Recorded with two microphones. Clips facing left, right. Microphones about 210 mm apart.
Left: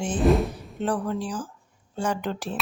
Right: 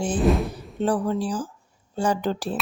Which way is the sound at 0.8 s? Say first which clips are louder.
Right 4 dB; 35° right (ahead or behind).